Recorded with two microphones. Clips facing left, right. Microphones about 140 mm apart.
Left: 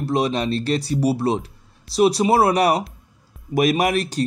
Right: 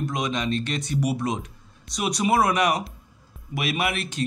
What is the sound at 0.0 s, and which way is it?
Speech, 35° left (ahead or behind).